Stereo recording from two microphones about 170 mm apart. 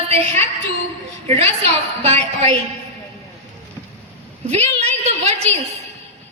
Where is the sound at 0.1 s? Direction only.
35° right (ahead or behind).